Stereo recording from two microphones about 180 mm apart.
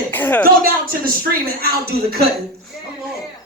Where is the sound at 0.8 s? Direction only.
55° right (ahead or behind).